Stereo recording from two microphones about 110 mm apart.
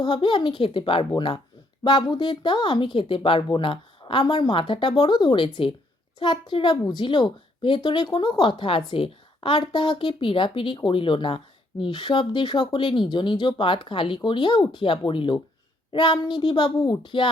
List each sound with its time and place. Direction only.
0.0 s speech: 50° left (ahead or behind)